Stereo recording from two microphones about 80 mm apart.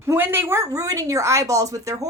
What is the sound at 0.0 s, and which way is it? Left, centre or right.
Speech, right.